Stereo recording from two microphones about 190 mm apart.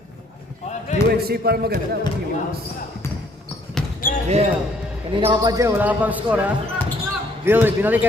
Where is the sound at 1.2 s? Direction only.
55° right (ahead or behind).